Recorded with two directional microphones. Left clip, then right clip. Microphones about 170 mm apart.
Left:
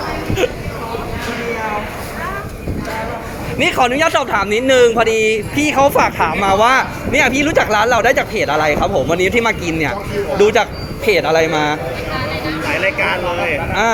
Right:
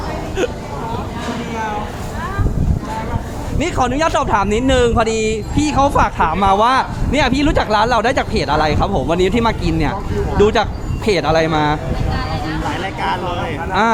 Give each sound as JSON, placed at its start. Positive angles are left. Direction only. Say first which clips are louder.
{"t": 3.6, "sound": "speech", "louder": "left 4 dB", "side_deg": 0}
{"t": 3.9, "sound": "speech", "louder": "left 1 dB", "side_deg": -15}
{"t": 5.5, "sound": "speech", "louder": "left 1 dB", "side_deg": -5}